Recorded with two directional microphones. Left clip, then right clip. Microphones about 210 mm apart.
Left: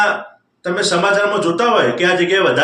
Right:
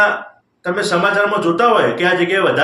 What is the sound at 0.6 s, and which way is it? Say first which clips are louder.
A man's voice: even; 5° right (ahead or behind).